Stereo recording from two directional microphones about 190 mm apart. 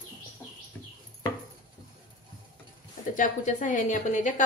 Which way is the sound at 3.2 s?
40° left (ahead or behind).